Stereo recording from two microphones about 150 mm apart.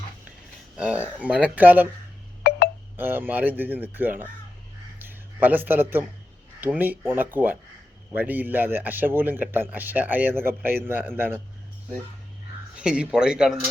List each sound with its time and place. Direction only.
0.8 s speech: 10° right (ahead or behind)
2.4 s telephone dialing: 90° left
2.9 s speech: 15° right (ahead or behind)
4.9 s a sound: 10° right (ahead or behind)
6.6 s speech: 10° right (ahead or behind)
12.7 s a man's voice: 5° right (ahead or behind)